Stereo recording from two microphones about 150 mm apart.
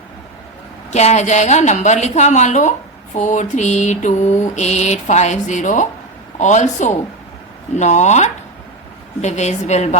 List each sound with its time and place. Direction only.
0.9 s mantra: 50° left (ahead or behind)